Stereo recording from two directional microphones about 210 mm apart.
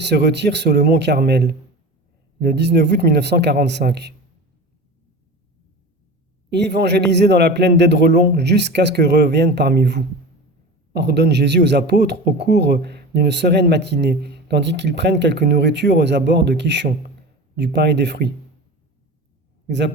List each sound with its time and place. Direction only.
0.0 s speech: 55° right (ahead or behind)
6.5 s speech: 55° right (ahead or behind)